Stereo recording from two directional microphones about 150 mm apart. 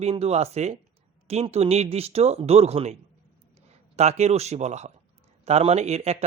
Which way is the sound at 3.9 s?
45° right (ahead or behind).